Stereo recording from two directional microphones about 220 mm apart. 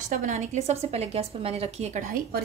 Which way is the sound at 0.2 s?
35° right (ahead or behind).